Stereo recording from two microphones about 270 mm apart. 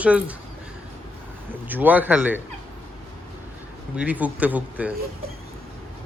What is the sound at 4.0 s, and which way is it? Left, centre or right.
Speech, centre.